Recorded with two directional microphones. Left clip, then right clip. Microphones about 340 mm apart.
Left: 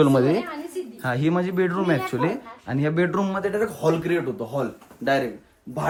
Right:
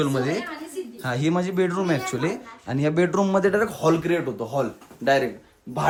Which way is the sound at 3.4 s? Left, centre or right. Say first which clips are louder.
Right 3 dB; right.